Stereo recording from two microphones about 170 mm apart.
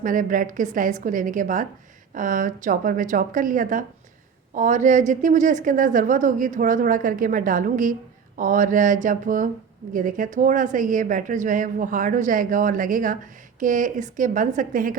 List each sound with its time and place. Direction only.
0.0 s a woman's voice: 50° right (ahead or behind)